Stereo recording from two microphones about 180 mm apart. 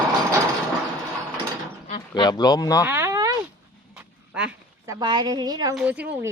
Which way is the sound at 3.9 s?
5° right (ahead or behind).